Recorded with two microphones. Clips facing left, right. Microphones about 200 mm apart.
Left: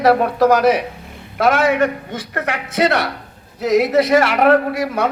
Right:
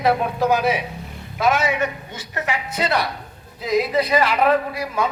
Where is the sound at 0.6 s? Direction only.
50° left (ahead or behind); by 5.1 s 70° left (ahead or behind).